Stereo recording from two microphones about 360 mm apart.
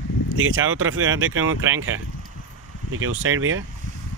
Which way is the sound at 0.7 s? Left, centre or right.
Right.